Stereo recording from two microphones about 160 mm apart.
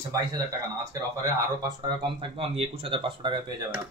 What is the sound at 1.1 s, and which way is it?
Speech, 25° right (ahead or behind).